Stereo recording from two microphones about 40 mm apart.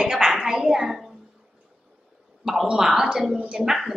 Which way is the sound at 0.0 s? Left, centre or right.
Centre.